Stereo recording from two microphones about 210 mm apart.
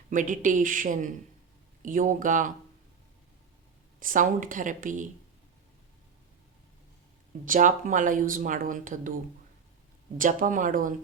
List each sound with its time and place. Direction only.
0.1 s speech: 40° right (ahead or behind)
4.0 s speech: 40° right (ahead or behind)
7.4 s speech: 40° right (ahead or behind)
10.2 s speech: 40° right (ahead or behind)